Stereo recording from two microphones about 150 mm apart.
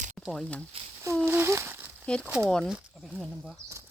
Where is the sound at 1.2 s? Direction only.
15° right (ahead or behind).